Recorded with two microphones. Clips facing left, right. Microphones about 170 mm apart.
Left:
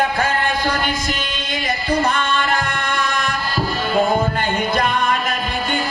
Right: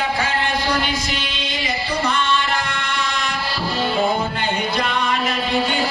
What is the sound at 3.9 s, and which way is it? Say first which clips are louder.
Music: left 6 dB; 50° left (ahead or behind).